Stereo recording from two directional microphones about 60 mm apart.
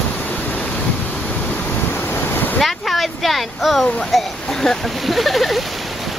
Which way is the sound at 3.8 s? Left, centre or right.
Centre.